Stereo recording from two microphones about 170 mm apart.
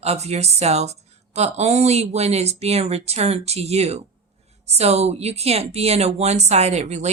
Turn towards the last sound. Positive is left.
turn(degrees=-40)  # may be behind; listen again after turning